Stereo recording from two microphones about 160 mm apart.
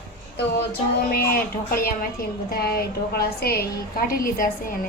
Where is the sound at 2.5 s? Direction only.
80° left; by 4.8 s 65° left (ahead or behind).